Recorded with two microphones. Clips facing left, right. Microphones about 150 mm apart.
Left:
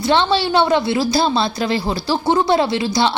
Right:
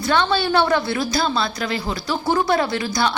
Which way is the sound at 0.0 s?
25° left (ahead or behind).